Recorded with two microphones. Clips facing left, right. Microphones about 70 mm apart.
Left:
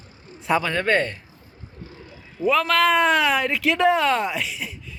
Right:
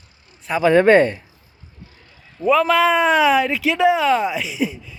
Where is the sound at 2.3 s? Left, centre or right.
Centre.